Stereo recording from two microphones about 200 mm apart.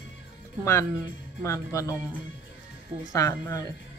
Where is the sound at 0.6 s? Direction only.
15° left (ahead or behind).